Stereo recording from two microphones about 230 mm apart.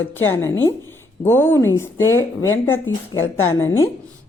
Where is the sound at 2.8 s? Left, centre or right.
Left.